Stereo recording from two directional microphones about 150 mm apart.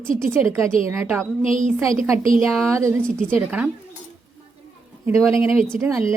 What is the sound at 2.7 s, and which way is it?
Speech, 20° right (ahead or behind).